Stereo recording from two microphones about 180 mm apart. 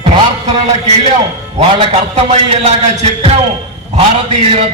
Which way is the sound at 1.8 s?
30° right (ahead or behind).